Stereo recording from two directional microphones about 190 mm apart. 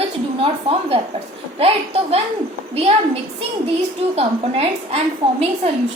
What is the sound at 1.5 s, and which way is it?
A woman's voice, 30° right (ahead or behind).